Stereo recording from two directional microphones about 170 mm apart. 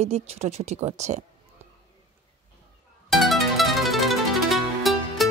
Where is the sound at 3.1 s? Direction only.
Centre (ahead or behind).